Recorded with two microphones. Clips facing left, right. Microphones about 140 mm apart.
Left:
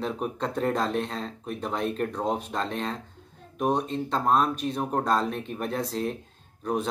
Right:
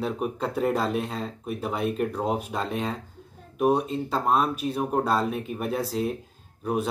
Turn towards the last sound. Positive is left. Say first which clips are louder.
# right 1 dB
turn(degrees=-5)  # may be behind; listen again after turning